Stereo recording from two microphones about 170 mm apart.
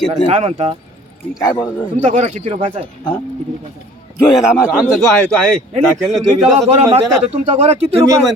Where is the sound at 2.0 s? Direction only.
45° right (ahead or behind).